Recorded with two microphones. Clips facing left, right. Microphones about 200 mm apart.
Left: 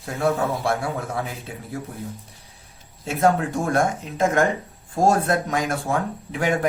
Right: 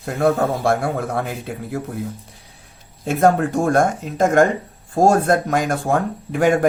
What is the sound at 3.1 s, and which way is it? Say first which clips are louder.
Speech: right 4 dB; 50° right (ahead or behind).